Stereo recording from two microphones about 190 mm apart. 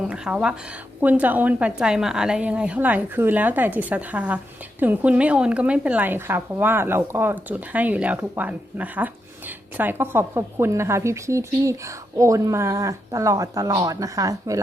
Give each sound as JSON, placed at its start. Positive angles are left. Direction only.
{"t": 0.0, "sound": "a woman's voice", "side_deg": -5}